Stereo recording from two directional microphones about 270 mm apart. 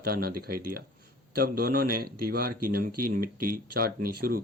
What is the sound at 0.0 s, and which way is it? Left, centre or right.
Speech, right.